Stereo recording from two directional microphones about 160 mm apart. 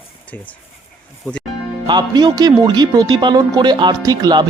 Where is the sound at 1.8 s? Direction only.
25° right (ahead or behind).